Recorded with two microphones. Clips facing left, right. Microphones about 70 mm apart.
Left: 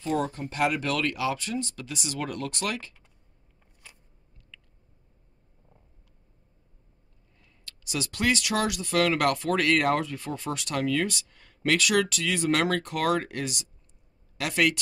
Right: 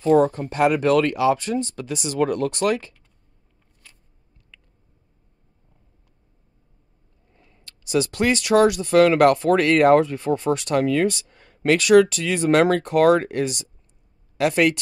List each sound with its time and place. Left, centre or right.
0.1 s speech: right
7.3 s speech: right